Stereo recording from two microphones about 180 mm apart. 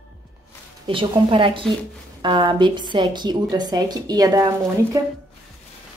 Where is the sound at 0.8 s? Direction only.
30° right (ahead or behind).